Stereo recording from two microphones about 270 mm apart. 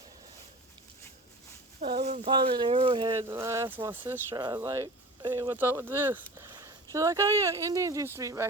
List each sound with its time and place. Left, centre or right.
2.0 s speech: right
2.3 s speech: centre